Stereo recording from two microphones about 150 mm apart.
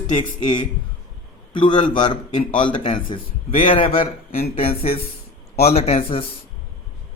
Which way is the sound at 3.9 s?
40° left (ahead or behind).